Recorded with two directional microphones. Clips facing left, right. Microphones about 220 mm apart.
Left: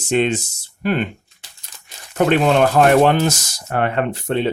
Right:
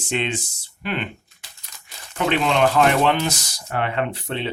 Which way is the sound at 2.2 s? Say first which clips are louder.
Left 5 dB; 45° left (ahead or behind).